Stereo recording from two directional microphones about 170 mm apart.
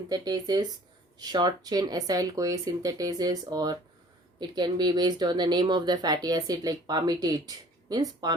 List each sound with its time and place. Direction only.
0.1 s speech: 25° right (ahead or behind)